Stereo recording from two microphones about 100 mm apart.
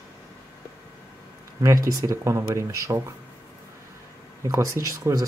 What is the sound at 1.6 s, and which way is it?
Speech, 35° right (ahead or behind).